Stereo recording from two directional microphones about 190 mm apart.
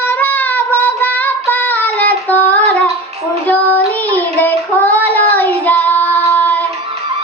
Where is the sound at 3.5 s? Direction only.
10° left (ahead or behind).